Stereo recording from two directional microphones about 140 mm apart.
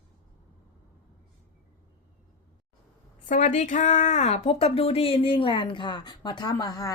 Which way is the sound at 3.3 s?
60° left (ahead or behind).